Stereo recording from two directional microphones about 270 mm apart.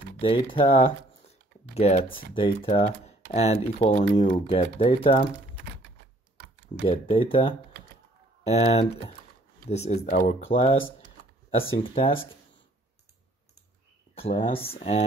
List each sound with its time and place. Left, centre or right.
0.2 s speech: centre
6.9 s speech: centre
11.8 s speech: centre
14.1 s speech: left